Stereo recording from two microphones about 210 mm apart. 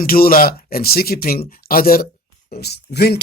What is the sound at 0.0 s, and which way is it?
Speech, 45° left (ahead or behind).